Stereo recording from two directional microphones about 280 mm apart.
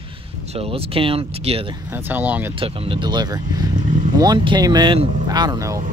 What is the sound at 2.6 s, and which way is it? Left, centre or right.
Speech, centre.